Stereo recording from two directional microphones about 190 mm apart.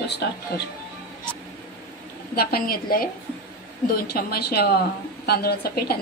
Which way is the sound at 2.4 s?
50° left (ahead or behind).